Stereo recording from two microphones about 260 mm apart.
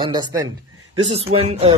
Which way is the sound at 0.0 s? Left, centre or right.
Centre.